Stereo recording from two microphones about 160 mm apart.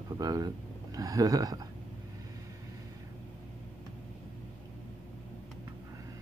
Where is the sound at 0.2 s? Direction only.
25° right (ahead or behind).